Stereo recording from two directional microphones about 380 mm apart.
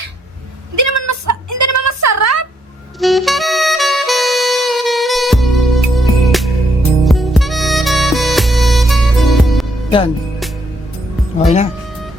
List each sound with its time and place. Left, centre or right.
0.8 s a sound: right
3.0 s saxophone: centre
7.0 s music: centre
11.3 s music: centre